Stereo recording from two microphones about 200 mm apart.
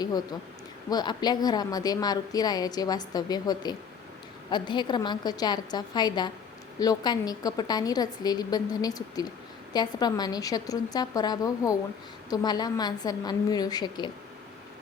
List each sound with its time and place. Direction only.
0.0 s speech: 20° left (ahead or behind)